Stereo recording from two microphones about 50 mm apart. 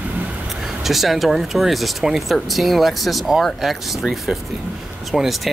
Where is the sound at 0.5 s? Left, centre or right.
Centre.